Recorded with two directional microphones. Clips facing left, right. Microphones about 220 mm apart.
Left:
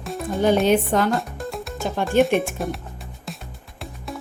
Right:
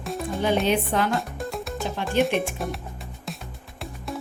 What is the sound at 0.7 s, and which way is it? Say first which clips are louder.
Speech: left 4 dB; 45° left (ahead or behind).